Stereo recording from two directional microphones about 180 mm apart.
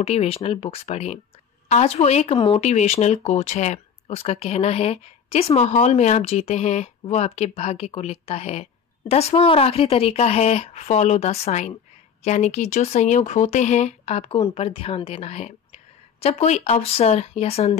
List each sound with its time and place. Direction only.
0.0 s speech: 35° left (ahead or behind)